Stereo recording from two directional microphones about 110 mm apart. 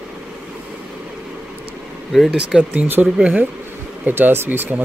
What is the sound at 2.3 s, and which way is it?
Speech, 10° right (ahead or behind).